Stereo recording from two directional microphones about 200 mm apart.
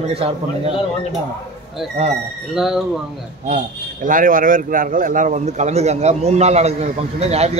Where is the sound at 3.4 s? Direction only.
40° right (ahead or behind).